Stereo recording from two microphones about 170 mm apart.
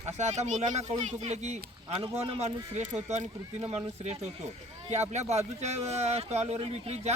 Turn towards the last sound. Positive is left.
turn(degrees=-35)  # may be behind; listen again after turning